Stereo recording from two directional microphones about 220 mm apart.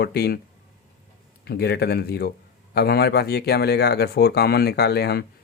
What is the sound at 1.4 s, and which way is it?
Speech, 45° left (ahead or behind).